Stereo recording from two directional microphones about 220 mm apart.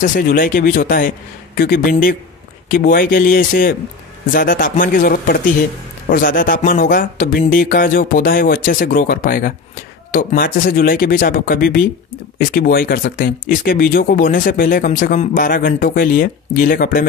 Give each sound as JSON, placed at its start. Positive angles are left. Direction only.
{"t": 0.0, "sound": "speech", "side_deg": 40}